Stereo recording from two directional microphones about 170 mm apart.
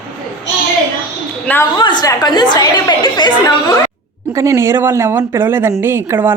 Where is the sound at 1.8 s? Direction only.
25° left (ahead or behind).